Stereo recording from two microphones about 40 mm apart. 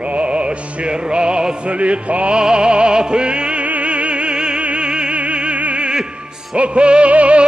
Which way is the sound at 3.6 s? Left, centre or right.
Right.